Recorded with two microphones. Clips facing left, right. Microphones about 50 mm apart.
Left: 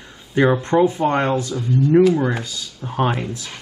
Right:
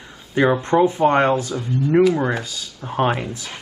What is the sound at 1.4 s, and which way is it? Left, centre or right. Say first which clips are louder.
Speech: left 3 dB; right.